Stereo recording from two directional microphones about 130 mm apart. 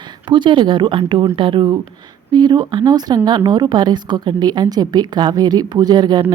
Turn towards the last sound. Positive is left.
turn(degrees=-35)  # may be behind; listen again after turning